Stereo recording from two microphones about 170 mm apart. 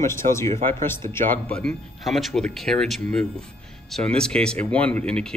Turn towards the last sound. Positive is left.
turn(degrees=5)  # may be behind; listen again after turning